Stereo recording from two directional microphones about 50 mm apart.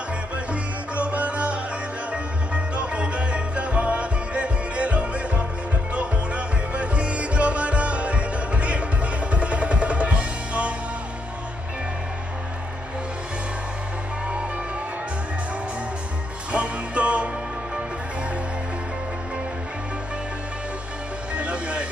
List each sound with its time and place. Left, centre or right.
0.5 s music: right
16.5 s music: right
21.4 s music: right